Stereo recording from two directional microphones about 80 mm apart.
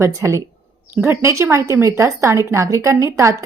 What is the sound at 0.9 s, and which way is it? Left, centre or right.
A woman's voice, right.